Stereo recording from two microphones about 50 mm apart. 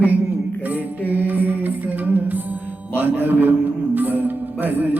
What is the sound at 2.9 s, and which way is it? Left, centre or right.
Music, right.